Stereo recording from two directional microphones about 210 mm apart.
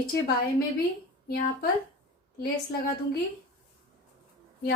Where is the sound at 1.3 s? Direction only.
45° left (ahead or behind).